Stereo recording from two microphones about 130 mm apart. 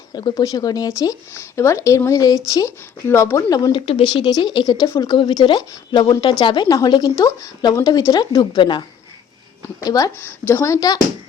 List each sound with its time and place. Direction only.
0.1 s speech: 30° left (ahead or behind)
9.8 s speech: 30° left (ahead or behind)
10.2 s speech: 15° left (ahead or behind)